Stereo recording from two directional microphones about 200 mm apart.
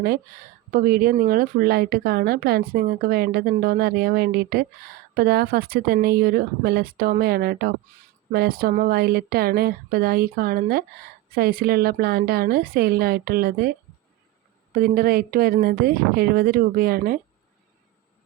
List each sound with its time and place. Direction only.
0.7 s a woman's voice: 45° right (ahead or behind)
7.9 s speech: 40° right (ahead or behind)
8.3 s a woman's voice: 50° right (ahead or behind)